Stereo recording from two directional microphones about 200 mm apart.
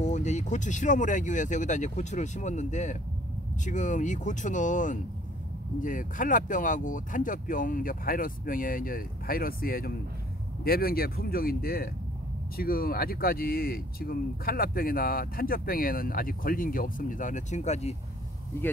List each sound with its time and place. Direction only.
0.0 s speech: 35° left (ahead or behind)